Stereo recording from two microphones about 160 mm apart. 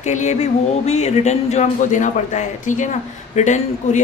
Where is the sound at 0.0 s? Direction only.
45° left (ahead or behind).